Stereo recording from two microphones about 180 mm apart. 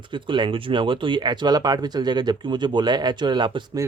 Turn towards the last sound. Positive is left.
turn(degrees=-25)  # may be behind; listen again after turning